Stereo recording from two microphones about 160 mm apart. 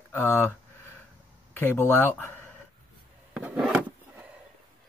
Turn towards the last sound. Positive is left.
turn(degrees=-5)  # may be behind; listen again after turning